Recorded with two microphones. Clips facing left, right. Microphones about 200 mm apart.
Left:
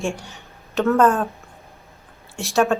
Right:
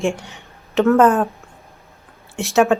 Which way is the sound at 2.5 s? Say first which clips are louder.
Right 4 dB; 20° right (ahead or behind).